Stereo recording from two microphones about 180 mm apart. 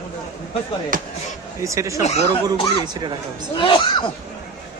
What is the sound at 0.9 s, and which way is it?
Speech, 50° right (ahead or behind).